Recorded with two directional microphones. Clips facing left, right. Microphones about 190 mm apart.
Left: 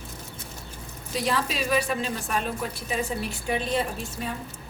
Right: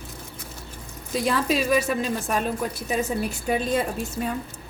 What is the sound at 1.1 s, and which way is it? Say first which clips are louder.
A woman's voice: right 4 dB; 45° right (ahead or behind).